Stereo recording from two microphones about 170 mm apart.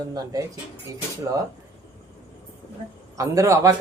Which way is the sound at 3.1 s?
20° right (ahead or behind).